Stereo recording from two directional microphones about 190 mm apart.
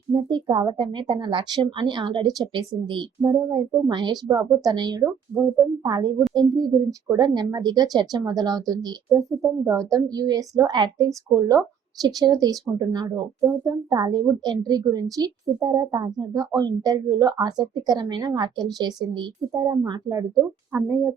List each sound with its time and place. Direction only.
0.1 s speech: 25° right (ahead or behind)